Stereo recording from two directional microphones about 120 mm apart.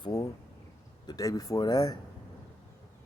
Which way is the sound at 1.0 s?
30° left (ahead or behind).